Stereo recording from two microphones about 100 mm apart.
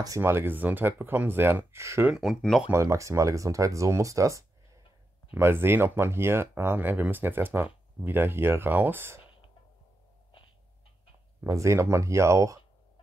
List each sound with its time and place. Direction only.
0.2 s speech: 25° right (ahead or behind)
2.0 s speech: 5° right (ahead or behind)
2.7 s speech: 30° right (ahead or behind)
11.4 s speech: 30° right (ahead or behind)